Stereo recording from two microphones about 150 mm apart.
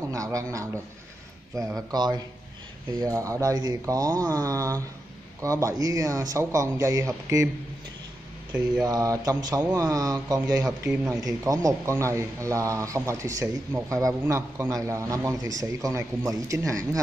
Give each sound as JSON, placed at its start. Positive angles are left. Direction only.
{"t": 0.1, "sound": "a man's voice", "side_deg": -20}
{"t": 8.8, "sound": "a man's voice", "side_deg": -20}